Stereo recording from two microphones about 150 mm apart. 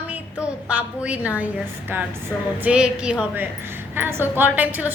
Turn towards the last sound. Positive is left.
turn(degrees=-10)  # may be behind; listen again after turning